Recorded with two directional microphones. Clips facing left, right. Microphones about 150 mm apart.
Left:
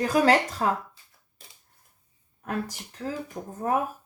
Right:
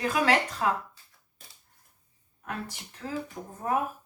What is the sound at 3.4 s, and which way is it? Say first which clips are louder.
Speech: left 4 dB; 40° left (ahead or behind).